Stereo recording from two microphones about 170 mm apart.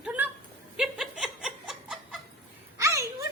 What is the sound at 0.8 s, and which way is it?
Snicker, 5° right (ahead or behind).